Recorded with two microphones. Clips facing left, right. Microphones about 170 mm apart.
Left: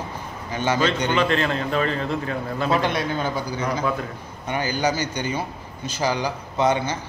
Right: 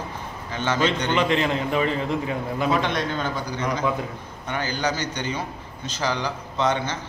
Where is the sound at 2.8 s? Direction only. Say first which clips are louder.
Left 2 dB; 10° left (ahead or behind).